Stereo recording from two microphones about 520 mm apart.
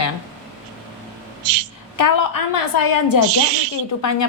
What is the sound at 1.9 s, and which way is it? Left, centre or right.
A woman's voice, left.